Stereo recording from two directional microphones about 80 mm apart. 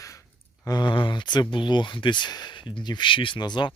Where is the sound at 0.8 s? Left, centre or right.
Left.